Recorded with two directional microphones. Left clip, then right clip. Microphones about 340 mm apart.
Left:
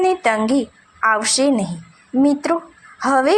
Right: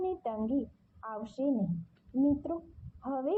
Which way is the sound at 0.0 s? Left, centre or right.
Left.